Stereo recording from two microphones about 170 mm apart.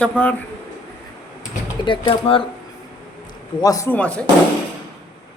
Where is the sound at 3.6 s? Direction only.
20° left (ahead or behind).